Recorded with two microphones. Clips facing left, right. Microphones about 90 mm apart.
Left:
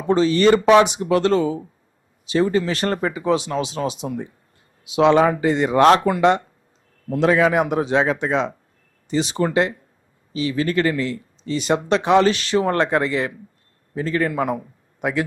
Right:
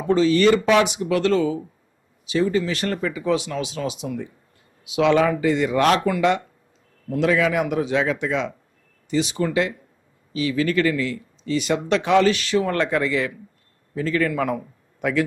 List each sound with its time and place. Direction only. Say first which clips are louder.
0.1 s speech: left 1 dB; 30° left (ahead or behind)